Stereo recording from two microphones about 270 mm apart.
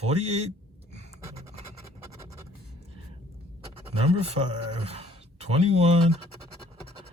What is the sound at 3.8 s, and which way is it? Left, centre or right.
Speech, right.